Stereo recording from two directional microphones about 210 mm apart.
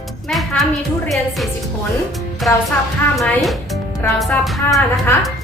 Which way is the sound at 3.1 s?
Centre (ahead or behind).